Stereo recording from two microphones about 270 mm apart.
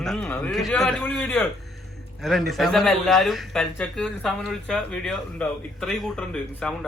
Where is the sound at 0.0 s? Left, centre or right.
Centre.